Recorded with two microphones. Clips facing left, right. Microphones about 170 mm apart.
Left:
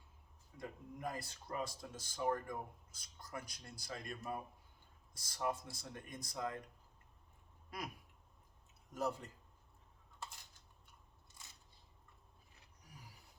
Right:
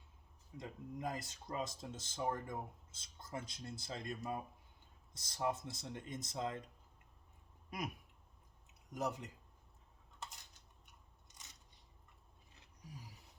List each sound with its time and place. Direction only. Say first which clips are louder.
0.5 s speech: right 2 dB; 20° right (ahead or behind)
7.7 s speech: right 3 dB; 20° right (ahead or behind)
8.9 s speech: left 1 dB; 20° right (ahead or behind)
10.8 s biting: even; 20° right (ahead or behind)